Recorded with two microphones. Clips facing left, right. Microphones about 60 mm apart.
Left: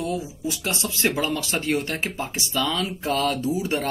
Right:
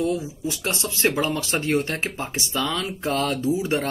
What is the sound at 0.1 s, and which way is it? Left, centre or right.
Speech, right.